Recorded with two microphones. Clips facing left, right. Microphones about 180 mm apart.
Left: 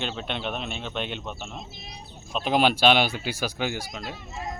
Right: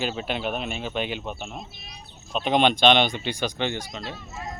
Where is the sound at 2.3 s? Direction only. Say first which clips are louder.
Right 1 dB; centre (ahead or behind).